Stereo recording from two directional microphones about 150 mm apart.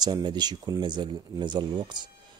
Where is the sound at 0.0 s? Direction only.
25° right (ahead or behind).